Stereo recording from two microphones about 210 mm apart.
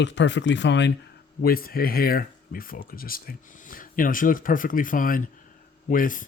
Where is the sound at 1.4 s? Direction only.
45° left (ahead or behind).